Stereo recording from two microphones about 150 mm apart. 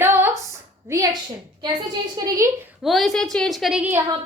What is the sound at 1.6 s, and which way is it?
Speech, 30° right (ahead or behind).